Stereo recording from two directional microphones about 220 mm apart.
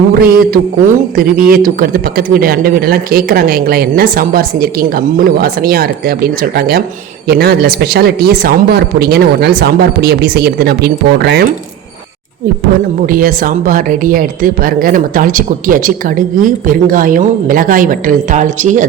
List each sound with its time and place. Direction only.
0.1 s speech: 40° right (ahead or behind)
13.0 s speech: 40° right (ahead or behind)